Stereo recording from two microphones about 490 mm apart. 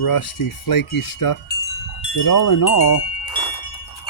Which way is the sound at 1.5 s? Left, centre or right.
Centre.